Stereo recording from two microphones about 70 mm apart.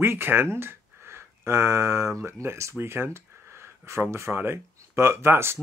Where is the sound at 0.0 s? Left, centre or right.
Right.